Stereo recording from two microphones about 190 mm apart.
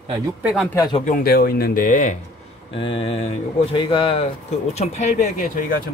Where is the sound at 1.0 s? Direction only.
50° left (ahead or behind).